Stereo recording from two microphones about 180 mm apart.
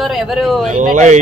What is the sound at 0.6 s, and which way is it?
Speech, 45° right (ahead or behind).